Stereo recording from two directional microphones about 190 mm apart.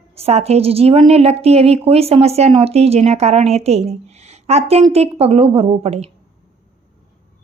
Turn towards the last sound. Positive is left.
turn(degrees=-30)  # may be behind; listen again after turning